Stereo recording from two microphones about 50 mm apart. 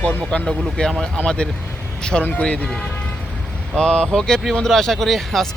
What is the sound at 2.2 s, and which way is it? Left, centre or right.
Speech, left.